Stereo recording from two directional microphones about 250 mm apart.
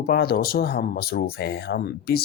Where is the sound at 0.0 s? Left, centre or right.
Left.